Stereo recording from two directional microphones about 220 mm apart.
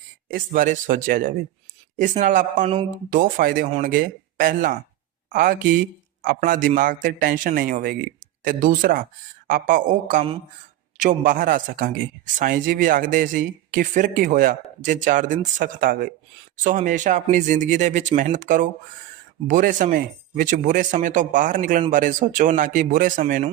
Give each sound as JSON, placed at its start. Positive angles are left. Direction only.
{"t": 0.3, "sound": "speech", "side_deg": -40}